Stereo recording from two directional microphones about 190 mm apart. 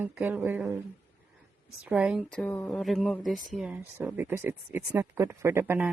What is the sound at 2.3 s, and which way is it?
Speech, 5° left (ahead or behind).